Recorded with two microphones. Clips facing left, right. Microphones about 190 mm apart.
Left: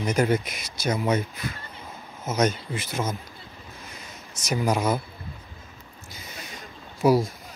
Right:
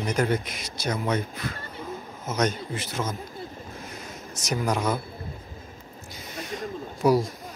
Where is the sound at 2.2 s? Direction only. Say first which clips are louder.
Left 2 dB; 5° left (ahead or behind).